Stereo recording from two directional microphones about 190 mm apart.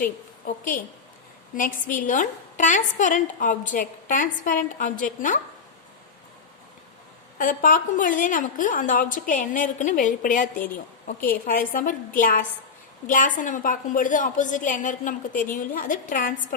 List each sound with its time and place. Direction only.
0.4 s a woman's voice: 45° left (ahead or behind)
7.3 s a woman's voice: 45° left (ahead or behind)